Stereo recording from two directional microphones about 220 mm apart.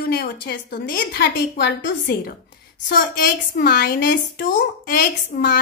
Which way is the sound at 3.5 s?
45° left (ahead or behind).